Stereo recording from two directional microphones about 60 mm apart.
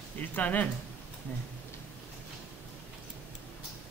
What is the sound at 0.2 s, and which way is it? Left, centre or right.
Speech, left.